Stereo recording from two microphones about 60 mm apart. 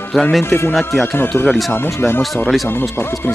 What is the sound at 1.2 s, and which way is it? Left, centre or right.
Speech, left.